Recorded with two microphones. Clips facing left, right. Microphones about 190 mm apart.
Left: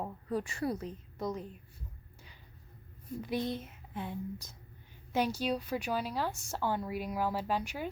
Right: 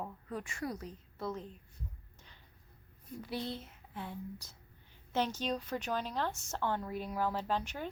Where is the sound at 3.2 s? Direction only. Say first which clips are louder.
Left 5 dB; 15° left (ahead or behind).